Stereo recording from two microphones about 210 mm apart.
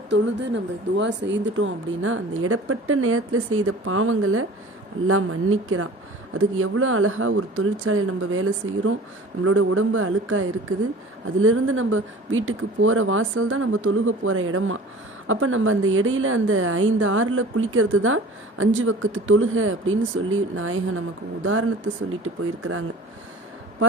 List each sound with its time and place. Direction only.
0.1 s a woman's voice: 55° right (ahead or behind); by 9.0 s 75° right (ahead or behind)
9.4 s a woman's voice: 90° right
22.2 s speech: 90° right